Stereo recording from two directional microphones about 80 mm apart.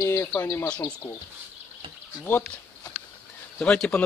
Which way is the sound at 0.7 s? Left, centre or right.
Centre.